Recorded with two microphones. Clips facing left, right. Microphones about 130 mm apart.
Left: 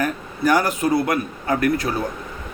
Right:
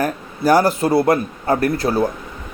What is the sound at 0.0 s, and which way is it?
A man's voice, 35° right (ahead or behind).